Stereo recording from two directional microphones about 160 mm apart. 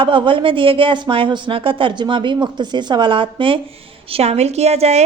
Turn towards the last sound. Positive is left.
turn(degrees=-40)  # may be behind; listen again after turning